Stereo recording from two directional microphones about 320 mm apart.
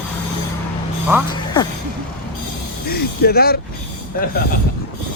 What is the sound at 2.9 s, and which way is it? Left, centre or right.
Speech, left.